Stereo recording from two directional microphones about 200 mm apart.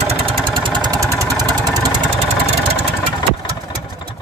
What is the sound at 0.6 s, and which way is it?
Engine, 20° right (ahead or behind).